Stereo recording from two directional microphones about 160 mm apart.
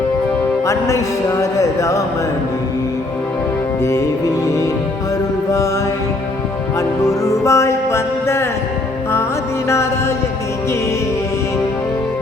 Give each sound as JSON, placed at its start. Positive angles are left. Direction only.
{"t": 0.6, "sound": "speech", "side_deg": 20}
{"t": 4.4, "sound": "music", "side_deg": 20}
{"t": 6.7, "sound": "music", "side_deg": 20}